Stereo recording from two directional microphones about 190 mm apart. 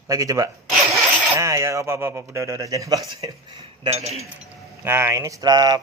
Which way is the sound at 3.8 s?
35° right (ahead or behind).